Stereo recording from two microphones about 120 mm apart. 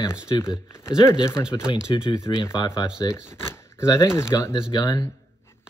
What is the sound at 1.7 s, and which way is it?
Speech, 40° left (ahead or behind).